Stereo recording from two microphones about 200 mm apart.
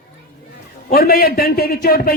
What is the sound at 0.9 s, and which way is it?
A man's voice, 50° left (ahead or behind).